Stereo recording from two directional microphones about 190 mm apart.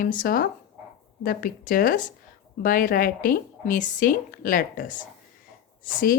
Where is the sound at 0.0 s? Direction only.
45° left (ahead or behind).